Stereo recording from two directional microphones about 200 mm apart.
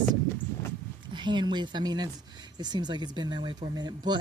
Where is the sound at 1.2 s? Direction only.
20° right (ahead or behind).